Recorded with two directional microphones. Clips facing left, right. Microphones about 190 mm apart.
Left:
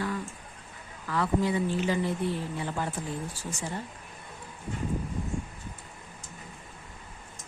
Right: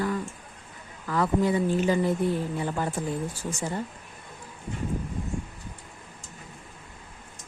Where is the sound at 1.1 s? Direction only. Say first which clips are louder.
Right 3 dB; 45° right (ahead or behind).